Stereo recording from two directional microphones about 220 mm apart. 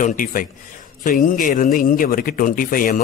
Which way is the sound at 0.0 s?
40° left (ahead or behind).